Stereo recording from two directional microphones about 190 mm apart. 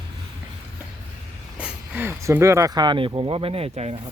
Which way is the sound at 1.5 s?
5° right (ahead or behind).